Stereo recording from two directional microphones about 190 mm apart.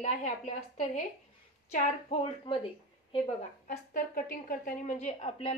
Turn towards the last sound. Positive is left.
turn(degrees=35)  # may be behind; listen again after turning